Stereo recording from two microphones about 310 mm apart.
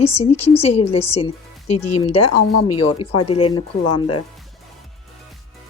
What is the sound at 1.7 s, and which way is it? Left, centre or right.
Speech, left.